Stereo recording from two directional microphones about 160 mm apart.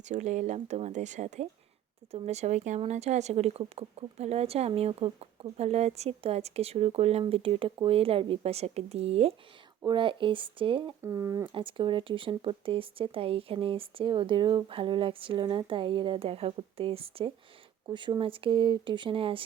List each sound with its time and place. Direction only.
0.0 s speech: 50° right (ahead or behind); by 10.9 s 30° right (ahead or behind)
11.0 s speech: 20° right (ahead or behind)
11.5 s speech: 30° right (ahead or behind)